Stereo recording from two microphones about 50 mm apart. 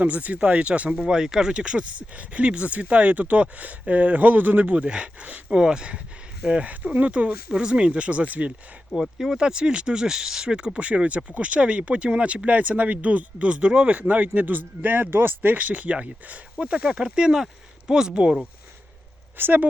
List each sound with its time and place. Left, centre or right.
0.0 s speech: right
6.5 s speech: right
9.0 s speech: centre
10.8 s speech: right
15.4 s speech: right
19.4 s speech: right